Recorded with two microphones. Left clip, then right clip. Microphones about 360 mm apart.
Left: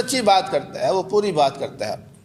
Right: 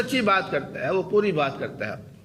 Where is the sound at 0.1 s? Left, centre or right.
Centre.